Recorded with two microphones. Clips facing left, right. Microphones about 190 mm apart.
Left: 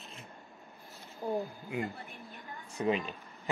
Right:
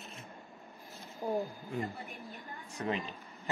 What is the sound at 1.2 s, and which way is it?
Speech, 15° right (ahead or behind).